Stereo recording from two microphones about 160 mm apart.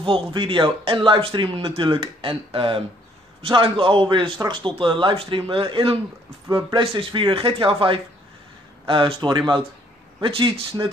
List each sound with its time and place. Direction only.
0.0 s speech: 30° right (ahead or behind)